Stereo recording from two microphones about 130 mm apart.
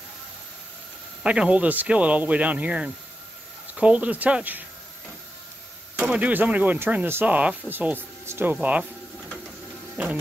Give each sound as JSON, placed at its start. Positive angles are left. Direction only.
{"t": 1.2, "sound": "speech", "side_deg": -10}
{"t": 5.9, "sound": "speech", "side_deg": -10}
{"t": 10.0, "sound": "speech", "side_deg": -10}